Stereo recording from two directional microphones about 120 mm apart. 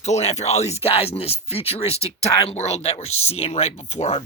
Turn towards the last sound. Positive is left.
turn(degrees=65)  # may be behind; listen again after turning